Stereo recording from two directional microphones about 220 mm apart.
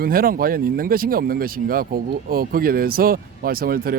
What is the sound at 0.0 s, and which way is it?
Speech, 40° right (ahead or behind).